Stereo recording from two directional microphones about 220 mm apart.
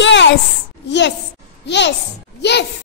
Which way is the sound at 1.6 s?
50° left (ahead or behind).